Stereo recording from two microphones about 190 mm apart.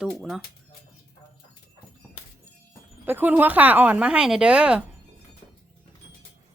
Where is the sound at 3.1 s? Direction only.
10° right (ahead or behind).